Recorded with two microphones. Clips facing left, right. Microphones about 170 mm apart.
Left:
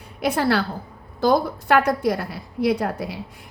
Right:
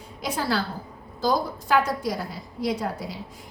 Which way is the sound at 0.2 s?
65° left (ahead or behind).